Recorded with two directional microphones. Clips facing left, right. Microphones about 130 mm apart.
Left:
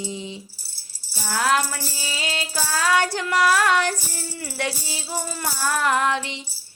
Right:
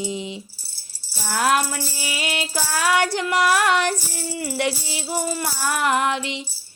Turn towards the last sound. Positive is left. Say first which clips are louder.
# right 1 dB
turn(degrees=-15)  # may be behind; listen again after turning